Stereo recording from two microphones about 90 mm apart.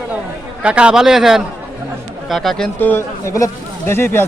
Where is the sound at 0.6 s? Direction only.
10° right (ahead or behind).